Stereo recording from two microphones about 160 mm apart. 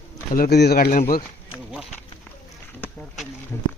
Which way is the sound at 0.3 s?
75° left (ahead or behind).